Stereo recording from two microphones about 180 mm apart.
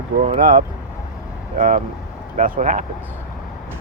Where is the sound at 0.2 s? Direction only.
50° right (ahead or behind).